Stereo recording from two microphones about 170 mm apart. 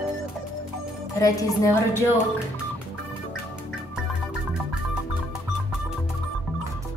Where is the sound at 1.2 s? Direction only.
20° left (ahead or behind).